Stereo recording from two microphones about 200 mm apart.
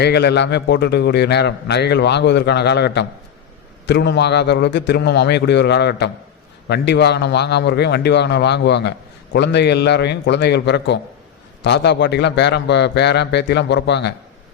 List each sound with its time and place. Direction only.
0.0 s a man's voice: 55° left (ahead or behind)